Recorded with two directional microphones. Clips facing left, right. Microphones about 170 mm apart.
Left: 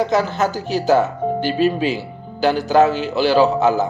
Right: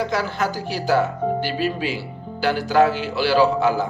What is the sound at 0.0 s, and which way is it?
Speech, 20° left (ahead or behind).